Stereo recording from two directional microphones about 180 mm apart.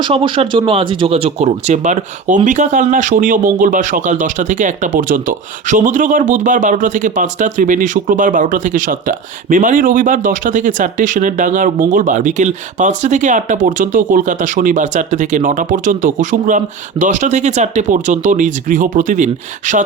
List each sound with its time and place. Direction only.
0.0 s speech: 30° right (ahead or behind)